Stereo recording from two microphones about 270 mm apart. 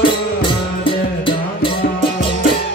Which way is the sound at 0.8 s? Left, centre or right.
Centre.